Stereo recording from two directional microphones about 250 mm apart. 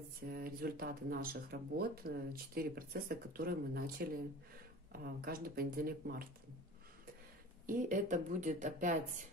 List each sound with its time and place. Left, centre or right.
0.3 s speech: right
7.6 s speech: right